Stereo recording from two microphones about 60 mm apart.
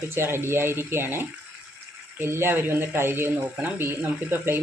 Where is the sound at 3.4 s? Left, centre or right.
Right.